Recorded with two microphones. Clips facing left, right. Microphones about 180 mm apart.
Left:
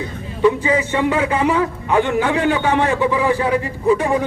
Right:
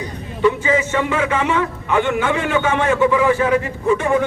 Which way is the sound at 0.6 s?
35° left (ahead or behind).